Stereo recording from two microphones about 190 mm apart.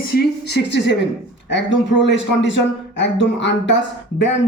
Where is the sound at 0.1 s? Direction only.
55° left (ahead or behind).